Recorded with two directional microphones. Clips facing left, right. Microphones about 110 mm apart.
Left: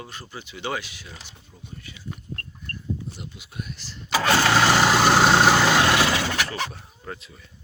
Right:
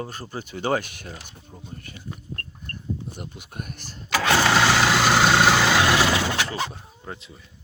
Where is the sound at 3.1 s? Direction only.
50° right (ahead or behind).